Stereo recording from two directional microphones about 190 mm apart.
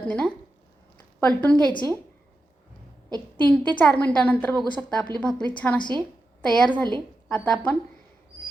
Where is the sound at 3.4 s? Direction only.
5° left (ahead or behind).